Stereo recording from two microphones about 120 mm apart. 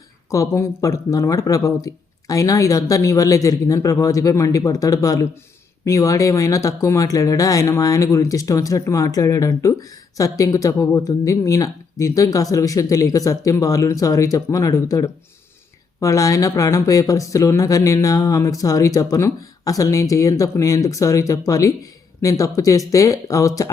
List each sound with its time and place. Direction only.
0.3 s speech: 25° left (ahead or behind)